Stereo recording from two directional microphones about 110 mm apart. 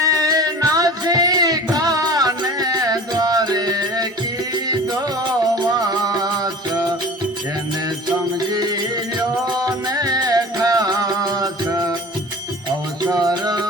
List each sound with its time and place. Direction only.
0.0 s music: 35° right (ahead or behind)
6.1 s music: 35° right (ahead or behind)
8.4 s music: 35° right (ahead or behind)
13.1 s music: 35° right (ahead or behind)